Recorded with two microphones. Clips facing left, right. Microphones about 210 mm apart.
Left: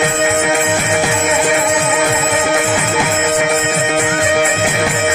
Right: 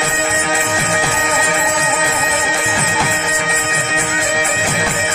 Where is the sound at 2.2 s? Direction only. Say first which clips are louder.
Left 5 dB; 55° left (ahead or behind).